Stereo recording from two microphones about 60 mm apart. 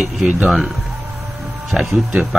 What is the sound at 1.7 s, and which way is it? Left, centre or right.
Speech, centre.